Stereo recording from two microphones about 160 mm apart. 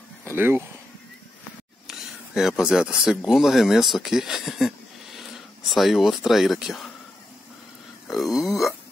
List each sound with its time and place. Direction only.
0.2 s speech: 15° right (ahead or behind)
1.9 s speech: 5° right (ahead or behind)
8.4 s burping: centre (ahead or behind)